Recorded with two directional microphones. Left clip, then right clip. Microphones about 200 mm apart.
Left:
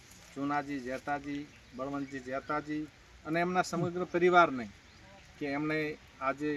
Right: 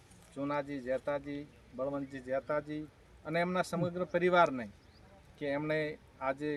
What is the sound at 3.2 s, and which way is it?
Speech, 30° right (ahead or behind).